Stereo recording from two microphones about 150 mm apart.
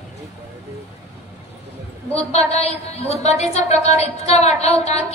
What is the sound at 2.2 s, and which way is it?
A woman's voice, 45° left (ahead or behind).